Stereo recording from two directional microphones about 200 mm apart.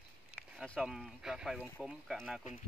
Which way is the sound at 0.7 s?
Centre (ahead or behind).